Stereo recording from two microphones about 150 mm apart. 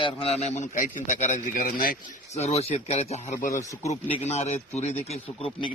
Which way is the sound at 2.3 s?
45° left (ahead or behind).